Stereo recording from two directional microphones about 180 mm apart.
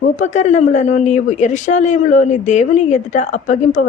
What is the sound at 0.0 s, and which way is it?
Speech, 40° left (ahead or behind).